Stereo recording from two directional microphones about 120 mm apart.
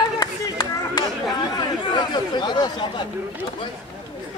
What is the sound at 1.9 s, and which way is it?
Speech, 35° left (ahead or behind).